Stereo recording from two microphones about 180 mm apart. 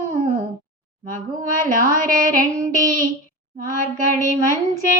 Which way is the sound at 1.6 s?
50° right (ahead or behind).